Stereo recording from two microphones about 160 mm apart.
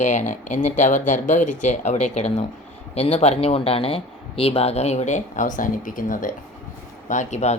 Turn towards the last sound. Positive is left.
turn(degrees=45)  # may be behind; listen again after turning